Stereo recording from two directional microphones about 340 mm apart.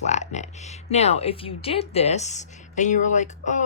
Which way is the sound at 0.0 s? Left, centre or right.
Centre.